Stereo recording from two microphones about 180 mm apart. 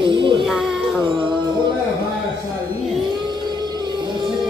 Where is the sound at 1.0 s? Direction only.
25° right (ahead or behind).